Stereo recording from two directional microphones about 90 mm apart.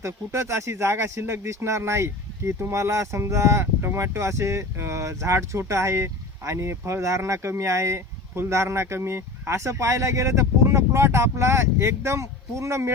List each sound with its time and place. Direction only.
0.0 s speech: 30° right (ahead or behind)